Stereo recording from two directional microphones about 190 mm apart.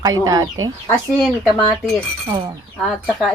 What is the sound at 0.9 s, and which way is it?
Speech, 5° left (ahead or behind).